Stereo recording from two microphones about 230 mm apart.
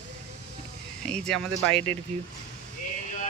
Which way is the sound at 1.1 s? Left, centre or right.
Centre.